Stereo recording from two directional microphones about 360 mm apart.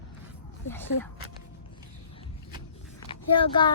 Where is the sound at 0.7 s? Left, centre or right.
Centre.